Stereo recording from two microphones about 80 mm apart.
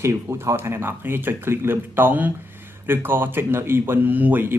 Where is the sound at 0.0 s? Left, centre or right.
Right.